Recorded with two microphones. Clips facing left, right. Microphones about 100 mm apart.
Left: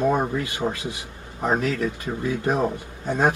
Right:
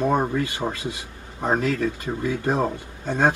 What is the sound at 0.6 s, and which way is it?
Speech, 20° left (ahead or behind).